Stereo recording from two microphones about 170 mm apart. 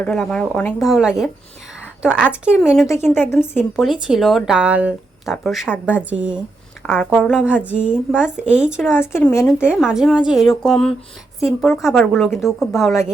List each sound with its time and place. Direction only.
0.0 s speech: 5° left (ahead or behind)
2.9 s a woman's voice: 15° left (ahead or behind)
3.6 s a woman's voice: centre (ahead or behind)
6.8 s speech: 5° left (ahead or behind)
9.0 s a woman's voice: 15° left (ahead or behind)
9.6 s speech: 5° right (ahead or behind)